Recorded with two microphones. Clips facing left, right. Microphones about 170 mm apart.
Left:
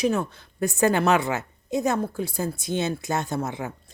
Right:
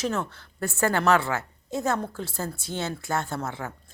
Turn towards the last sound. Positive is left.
turn(degrees=15)  # may be behind; listen again after turning